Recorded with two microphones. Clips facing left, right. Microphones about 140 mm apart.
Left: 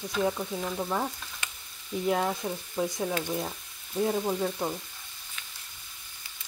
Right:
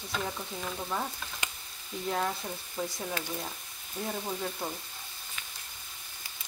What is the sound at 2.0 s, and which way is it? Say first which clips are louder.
Speech: left 4 dB; 10° left (ahead or behind).